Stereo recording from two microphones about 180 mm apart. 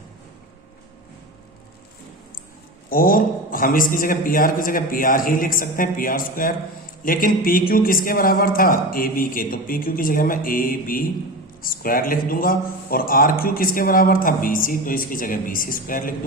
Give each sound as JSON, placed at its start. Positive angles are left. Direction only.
{"t": 2.9, "sound": "speech", "side_deg": 50}